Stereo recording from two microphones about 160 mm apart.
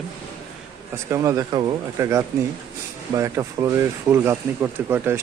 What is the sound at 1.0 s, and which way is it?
Speech, 20° right (ahead or behind).